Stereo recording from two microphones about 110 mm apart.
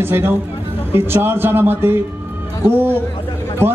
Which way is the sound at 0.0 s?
20° right (ahead or behind).